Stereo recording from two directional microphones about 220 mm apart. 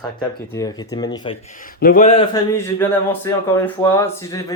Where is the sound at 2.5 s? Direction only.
10° left (ahead or behind).